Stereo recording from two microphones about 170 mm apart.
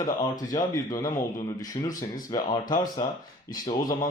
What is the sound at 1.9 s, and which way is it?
Speech, 55° left (ahead or behind).